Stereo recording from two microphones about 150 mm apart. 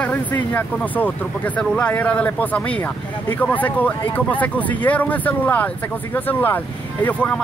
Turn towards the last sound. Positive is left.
turn(degrees=10)  # may be behind; listen again after turning